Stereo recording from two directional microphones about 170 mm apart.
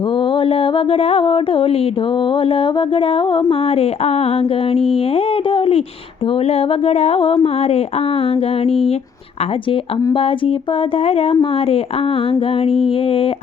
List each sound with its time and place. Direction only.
0.1 s mantra: 30° left (ahead or behind)
10.0 s mantra: 30° left (ahead or behind)